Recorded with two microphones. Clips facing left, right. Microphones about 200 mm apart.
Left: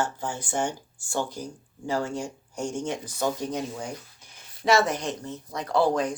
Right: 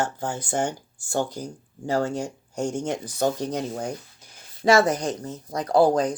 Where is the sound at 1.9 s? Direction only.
40° right (ahead or behind).